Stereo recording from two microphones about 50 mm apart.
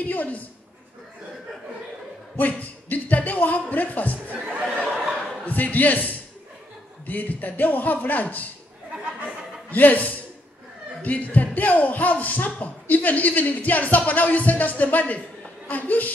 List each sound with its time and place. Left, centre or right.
0.0 s speech: left
2.3 s speech: left
4.3 s speech: right
5.4 s speech: left
9.7 s speech: left